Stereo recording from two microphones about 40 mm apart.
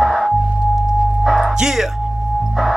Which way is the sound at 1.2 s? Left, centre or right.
Centre.